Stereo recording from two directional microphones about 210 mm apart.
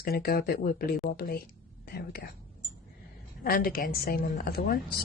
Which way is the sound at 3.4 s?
45° left (ahead or behind).